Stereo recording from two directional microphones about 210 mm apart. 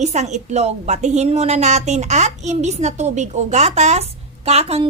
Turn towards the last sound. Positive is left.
turn(degrees=-30)  # may be behind; listen again after turning